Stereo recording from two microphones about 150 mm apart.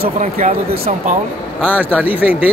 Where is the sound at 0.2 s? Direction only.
55° right (ahead or behind).